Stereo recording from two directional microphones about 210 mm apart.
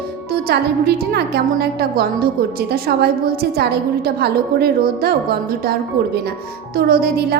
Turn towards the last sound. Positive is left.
turn(degrees=-45)  # may be behind; listen again after turning